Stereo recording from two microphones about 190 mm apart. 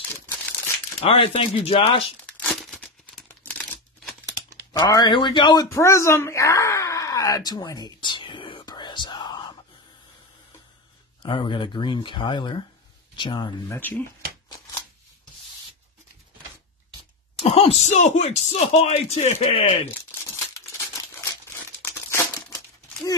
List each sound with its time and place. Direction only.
1.0 s speech: 30° left (ahead or behind)
2.2 s tearing: 5° left (ahead or behind)
3.3 s crumpling: 10° left (ahead or behind)
4.7 s speech: 20° left (ahead or behind)
11.2 s speech: 25° left (ahead or behind)
13.7 s speech: 10° left (ahead or behind)
17.4 s speech: 30° left (ahead or behind)
19.9 s crumpling: 15° left (ahead or behind)